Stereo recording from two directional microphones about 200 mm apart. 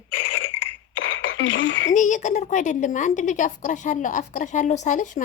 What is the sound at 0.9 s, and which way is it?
Throat clearing, 65° left (ahead or behind).